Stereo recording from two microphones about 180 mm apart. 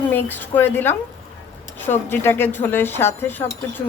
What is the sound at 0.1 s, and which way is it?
A woman's voice, 10° left (ahead or behind).